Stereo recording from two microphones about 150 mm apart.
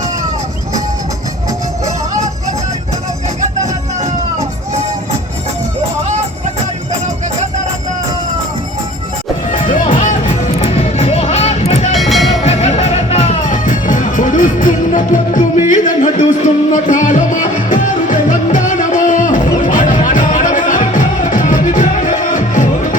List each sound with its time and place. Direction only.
9.5 s music: 60° left (ahead or behind)
11.9 s train: centre (ahead or behind)
12.4 s music: 45° left (ahead or behind)